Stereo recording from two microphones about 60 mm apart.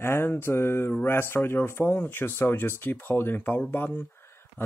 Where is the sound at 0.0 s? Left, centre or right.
Left.